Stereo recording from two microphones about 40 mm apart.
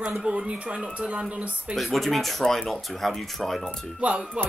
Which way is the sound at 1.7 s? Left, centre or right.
Centre.